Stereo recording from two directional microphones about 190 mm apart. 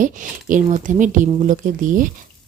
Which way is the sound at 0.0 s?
45° right (ahead or behind).